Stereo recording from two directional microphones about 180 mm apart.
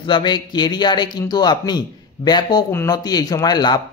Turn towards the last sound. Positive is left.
turn(degrees=25)  # may be behind; listen again after turning